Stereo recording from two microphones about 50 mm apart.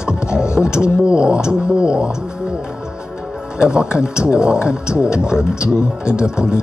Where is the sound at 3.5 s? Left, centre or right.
Centre.